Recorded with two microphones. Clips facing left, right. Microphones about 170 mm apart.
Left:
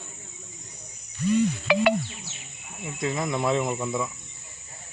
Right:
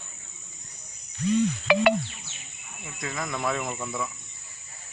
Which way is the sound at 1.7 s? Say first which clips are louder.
Right 1 dB; 55° right (ahead or behind).